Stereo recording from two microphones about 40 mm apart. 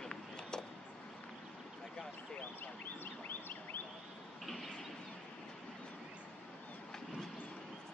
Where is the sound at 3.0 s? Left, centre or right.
Left.